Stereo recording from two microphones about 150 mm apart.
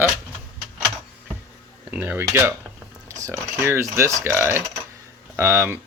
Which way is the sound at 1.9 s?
10° right (ahead or behind).